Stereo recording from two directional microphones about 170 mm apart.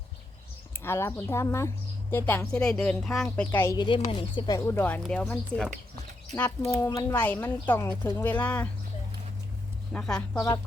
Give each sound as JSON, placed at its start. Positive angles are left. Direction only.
{"t": 0.7, "sound": "a woman's voice", "side_deg": 15}
{"t": 3.8, "sound": "a woman's voice", "side_deg": 25}
{"t": 6.7, "sound": "a woman's voice", "side_deg": 20}
{"t": 9.9, "sound": "speech", "side_deg": 5}
{"t": 10.3, "sound": "speech", "side_deg": 20}